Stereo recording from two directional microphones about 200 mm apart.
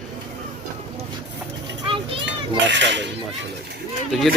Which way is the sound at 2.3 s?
60° right (ahead or behind).